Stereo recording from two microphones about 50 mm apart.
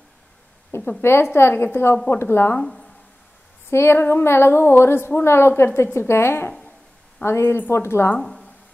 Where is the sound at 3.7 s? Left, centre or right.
Left.